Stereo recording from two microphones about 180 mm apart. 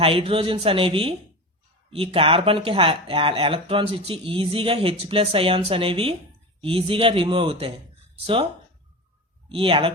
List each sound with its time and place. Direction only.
0.0 s speech: 30° right (ahead or behind)
2.1 s speech: 30° right (ahead or behind)
9.5 s speech: 30° right (ahead or behind)